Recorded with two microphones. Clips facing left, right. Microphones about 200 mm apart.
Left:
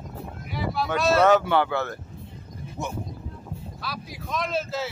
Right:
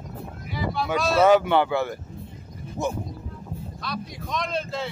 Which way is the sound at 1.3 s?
15° right (ahead or behind).